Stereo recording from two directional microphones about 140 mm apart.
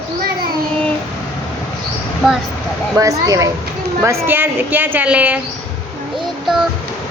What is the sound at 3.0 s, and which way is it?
A woman's voice, 25° right (ahead or behind).